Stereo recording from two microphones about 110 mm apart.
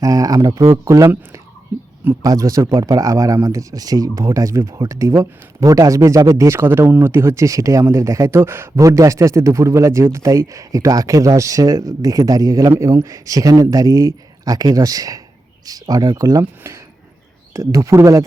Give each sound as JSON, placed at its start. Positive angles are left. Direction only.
{"t": 0.0, "sound": "speech", "side_deg": -35}